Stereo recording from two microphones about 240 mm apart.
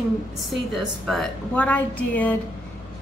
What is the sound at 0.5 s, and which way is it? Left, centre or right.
A woman's voice, centre.